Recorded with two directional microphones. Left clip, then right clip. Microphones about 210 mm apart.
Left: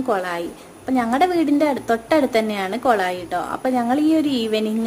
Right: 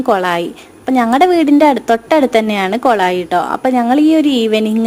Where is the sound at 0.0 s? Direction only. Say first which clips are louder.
Right 9 dB; 40° right (ahead or behind).